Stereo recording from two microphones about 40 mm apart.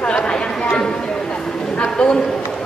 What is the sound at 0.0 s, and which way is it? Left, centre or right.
Chatter, left.